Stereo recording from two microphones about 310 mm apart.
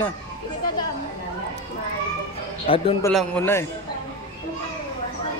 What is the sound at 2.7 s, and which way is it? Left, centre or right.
Speech, centre.